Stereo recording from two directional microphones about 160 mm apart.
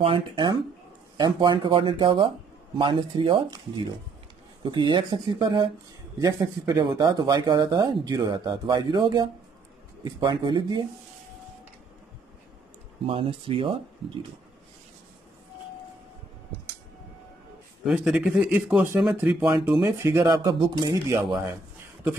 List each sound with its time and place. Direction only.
0.0 s speech: 30° right (ahead or behind)
4.6 s speech: 30° right (ahead or behind)
13.0 s speech: 35° right (ahead or behind)
17.8 s speech: 5° right (ahead or behind); by 21.3 s 20° right (ahead or behind)